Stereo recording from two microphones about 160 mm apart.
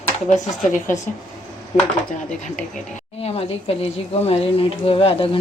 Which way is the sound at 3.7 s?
40° left (ahead or behind).